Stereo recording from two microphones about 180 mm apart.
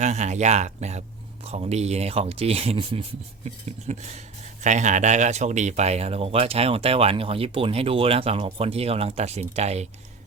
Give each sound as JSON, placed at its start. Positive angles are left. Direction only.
{"t": 0.0, "sound": "speech", "side_deg": -40}